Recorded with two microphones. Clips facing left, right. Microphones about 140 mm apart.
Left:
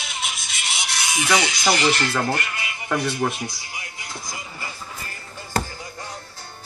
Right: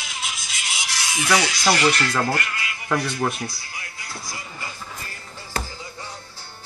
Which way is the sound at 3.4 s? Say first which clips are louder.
Even; 20° left (ahead or behind).